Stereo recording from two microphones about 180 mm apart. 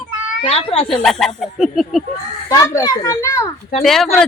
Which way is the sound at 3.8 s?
Centre (ahead or behind).